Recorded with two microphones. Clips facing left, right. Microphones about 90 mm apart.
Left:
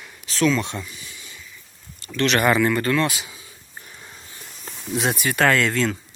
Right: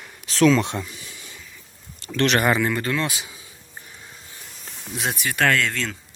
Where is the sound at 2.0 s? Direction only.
75° right (ahead or behind).